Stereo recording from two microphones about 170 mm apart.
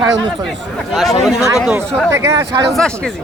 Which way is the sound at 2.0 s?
15° right (ahead or behind).